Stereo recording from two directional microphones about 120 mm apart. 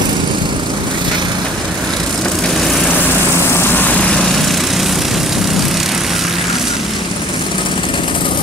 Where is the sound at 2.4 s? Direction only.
5° left (ahead or behind).